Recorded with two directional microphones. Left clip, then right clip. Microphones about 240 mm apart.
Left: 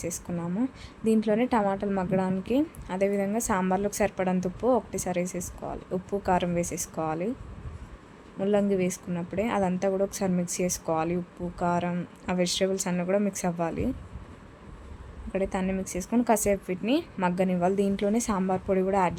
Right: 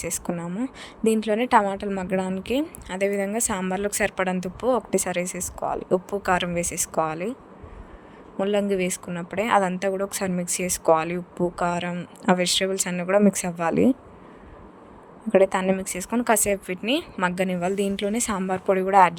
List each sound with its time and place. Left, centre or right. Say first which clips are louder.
0.0 s a woman's voice: right 4 dB; right
8.4 s a woman's voice: right 2 dB; right
15.3 s a woman's voice: right 10 dB; right